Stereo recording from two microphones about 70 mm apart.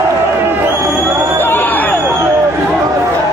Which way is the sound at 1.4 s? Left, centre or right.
Left.